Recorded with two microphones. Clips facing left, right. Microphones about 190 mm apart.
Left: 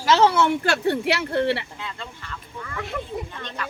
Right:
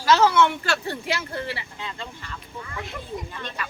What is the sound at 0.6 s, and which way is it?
Speech, 60° left (ahead or behind).